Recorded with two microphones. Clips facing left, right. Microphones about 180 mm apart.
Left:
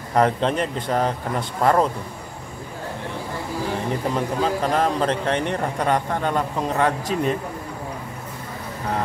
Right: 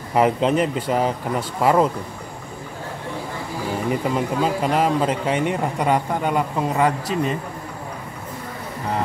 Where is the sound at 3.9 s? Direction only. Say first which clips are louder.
Right 4 dB; 10° right (ahead or behind).